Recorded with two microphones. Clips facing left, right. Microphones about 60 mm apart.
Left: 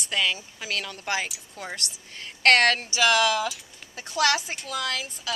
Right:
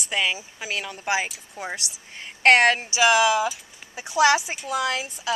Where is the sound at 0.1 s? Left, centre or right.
Centre.